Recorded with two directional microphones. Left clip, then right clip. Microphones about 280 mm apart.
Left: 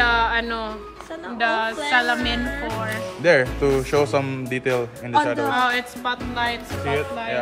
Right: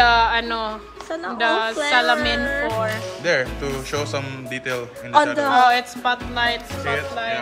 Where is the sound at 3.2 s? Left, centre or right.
Left.